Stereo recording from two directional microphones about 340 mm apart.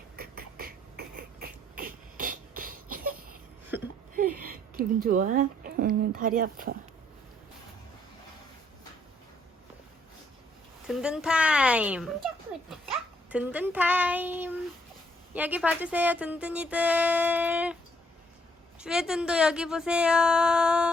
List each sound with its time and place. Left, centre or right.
0.2 s beatboxing: right
4.4 s a woman's voice: right
10.8 s speech: centre
13.3 s speech: centre
18.8 s speech: centre